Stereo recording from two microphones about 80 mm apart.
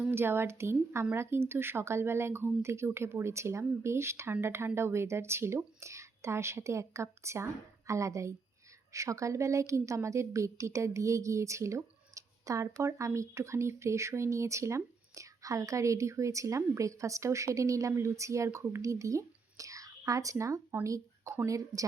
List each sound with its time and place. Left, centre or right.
0.1 s a woman's voice: right